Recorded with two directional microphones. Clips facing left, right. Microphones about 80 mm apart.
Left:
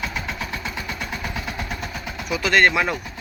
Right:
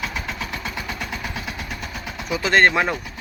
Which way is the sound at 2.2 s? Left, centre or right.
Right.